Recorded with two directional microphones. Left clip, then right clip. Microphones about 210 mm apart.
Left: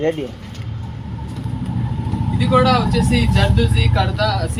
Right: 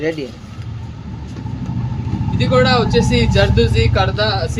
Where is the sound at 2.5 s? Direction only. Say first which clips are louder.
Right 2 dB; 50° right (ahead or behind).